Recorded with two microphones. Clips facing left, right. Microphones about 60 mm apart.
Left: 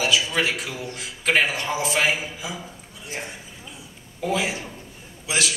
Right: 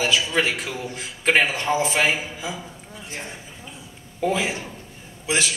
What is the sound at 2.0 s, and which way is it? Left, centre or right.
Speech, centre.